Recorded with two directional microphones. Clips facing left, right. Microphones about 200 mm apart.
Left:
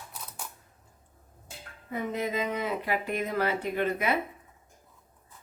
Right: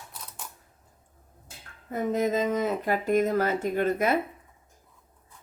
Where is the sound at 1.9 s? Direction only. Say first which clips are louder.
Right 5 dB; 45° right (ahead or behind).